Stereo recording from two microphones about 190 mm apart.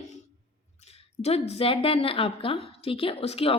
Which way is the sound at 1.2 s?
35° left (ahead or behind).